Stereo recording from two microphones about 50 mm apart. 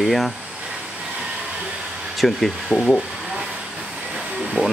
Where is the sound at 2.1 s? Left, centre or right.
Centre.